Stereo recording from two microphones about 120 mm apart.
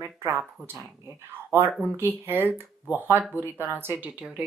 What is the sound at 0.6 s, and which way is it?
Speech, 20° right (ahead or behind).